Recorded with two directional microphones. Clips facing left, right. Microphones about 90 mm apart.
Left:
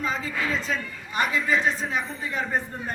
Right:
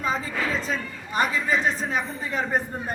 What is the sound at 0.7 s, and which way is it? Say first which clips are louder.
A man's voice: right 1 dB; 35° right (ahead or behind).